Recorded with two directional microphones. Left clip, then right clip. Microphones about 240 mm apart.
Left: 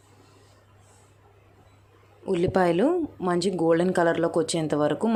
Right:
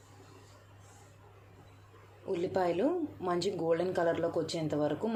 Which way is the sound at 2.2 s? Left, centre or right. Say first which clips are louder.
Left 9 dB; left.